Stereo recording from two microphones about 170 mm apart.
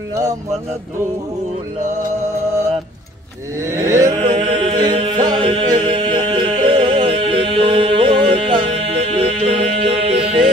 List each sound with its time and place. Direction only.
3.6 s mantra: 15° right (ahead or behind); by 10.2 s 35° right (ahead or behind)